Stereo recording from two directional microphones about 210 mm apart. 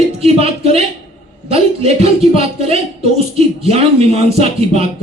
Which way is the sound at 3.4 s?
30° right (ahead or behind).